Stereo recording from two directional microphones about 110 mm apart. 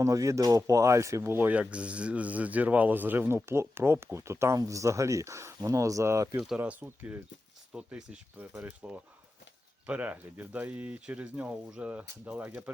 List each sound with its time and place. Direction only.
0.0 s speech: 30° right (ahead or behind)
6.6 s speech: 20° right (ahead or behind)